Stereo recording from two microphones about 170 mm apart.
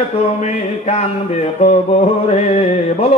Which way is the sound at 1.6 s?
40° left (ahead or behind).